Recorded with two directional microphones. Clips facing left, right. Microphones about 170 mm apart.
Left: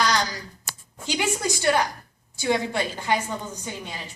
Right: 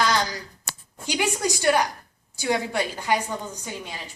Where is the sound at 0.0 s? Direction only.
25° right (ahead or behind).